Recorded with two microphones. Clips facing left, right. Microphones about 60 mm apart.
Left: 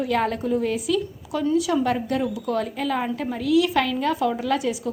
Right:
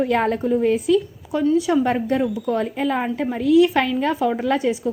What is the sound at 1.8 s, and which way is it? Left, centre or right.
Speech, right.